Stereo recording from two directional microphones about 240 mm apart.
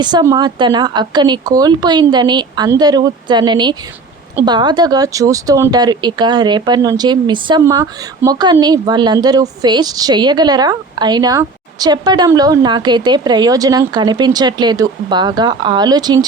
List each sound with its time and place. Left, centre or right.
0.0 s speech: centre